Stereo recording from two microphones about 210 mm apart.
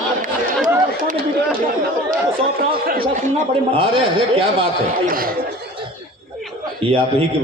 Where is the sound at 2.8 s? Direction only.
45° right (ahead or behind); by 4.4 s 25° right (ahead or behind).